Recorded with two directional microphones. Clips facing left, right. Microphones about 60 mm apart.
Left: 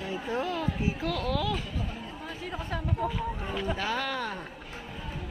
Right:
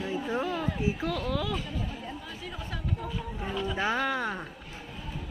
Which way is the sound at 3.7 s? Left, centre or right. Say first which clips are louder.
Right 3 dB; right.